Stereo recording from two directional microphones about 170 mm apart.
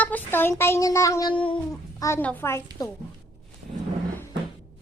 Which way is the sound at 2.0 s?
10° left (ahead or behind).